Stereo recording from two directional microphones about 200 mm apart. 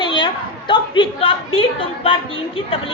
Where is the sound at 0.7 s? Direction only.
25° left (ahead or behind).